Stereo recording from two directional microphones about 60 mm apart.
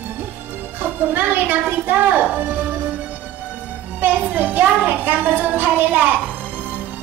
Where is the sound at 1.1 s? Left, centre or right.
Right.